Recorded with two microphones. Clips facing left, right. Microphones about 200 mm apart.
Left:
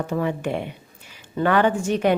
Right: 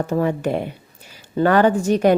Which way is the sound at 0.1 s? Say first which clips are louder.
Right 5 dB; 40° right (ahead or behind).